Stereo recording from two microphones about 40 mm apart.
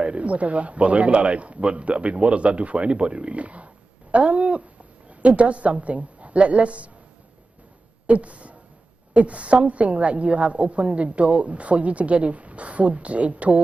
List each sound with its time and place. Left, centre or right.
0.0 s a man's voice: right
8.1 s a sound: right
9.1 s a man's voice: right